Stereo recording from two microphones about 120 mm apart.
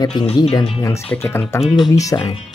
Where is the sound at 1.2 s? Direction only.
15° left (ahead or behind).